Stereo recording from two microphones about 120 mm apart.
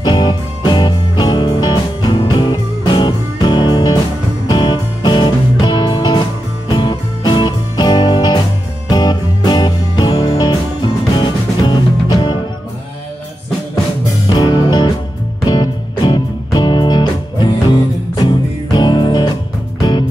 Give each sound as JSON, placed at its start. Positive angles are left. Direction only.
{"t": 0.0, "sound": "music", "side_deg": 35}
{"t": 14.3, "sound": "music", "side_deg": 40}